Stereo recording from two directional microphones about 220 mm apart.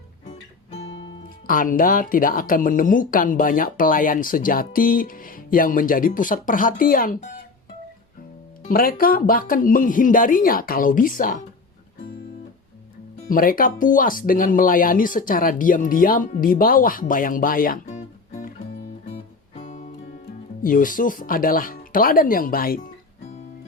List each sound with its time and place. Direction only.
1.5 s speech: 40° left (ahead or behind)
8.6 s speech: 40° left (ahead or behind)
13.2 s speech: 40° left (ahead or behind)
19.5 s guitar: 35° left (ahead or behind)
20.6 s speech: 40° left (ahead or behind)